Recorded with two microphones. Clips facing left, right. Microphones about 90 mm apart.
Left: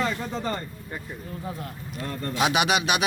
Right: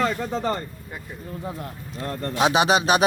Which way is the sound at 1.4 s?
30° right (ahead or behind).